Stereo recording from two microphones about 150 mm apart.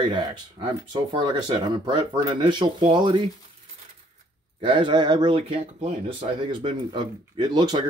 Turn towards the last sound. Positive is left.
turn(degrees=-30)  # may be behind; listen again after turning